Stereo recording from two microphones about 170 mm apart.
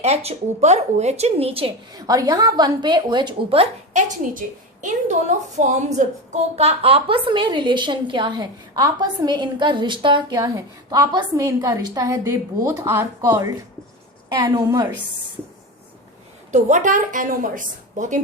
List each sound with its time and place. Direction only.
0.0 s speech: 40° right (ahead or behind)
1.9 s a woman's voice: 20° right (ahead or behind)
4.4 s a woman's voice: 50° right (ahead or behind); by 14.8 s 20° right (ahead or behind)
16.5 s a woman's voice: 45° right (ahead or behind)